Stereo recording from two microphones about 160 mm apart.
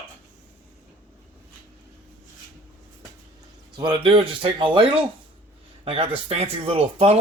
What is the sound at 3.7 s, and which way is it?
Speech, 25° right (ahead or behind).